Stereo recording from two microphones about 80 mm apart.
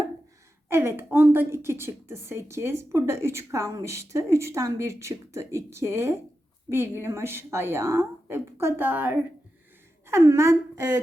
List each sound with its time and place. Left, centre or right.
0.7 s a woman's voice: right
10.1 s a woman's voice: right